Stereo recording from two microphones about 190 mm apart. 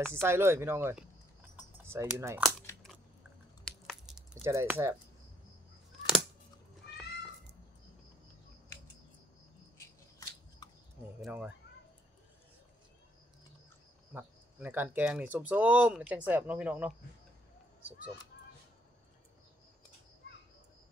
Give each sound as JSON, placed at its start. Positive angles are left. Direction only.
{"t": 0.0, "sound": "speech", "side_deg": -15}
{"t": 1.6, "sound": "typing", "side_deg": -10}
{"t": 3.6, "sound": "a sound", "side_deg": 0}
{"t": 4.4, "sound": "speech", "side_deg": -15}
{"t": 9.8, "sound": "scissors", "side_deg": 20}
{"t": 11.1, "sound": "speech", "side_deg": -5}
{"t": 14.1, "sound": "speech", "side_deg": -10}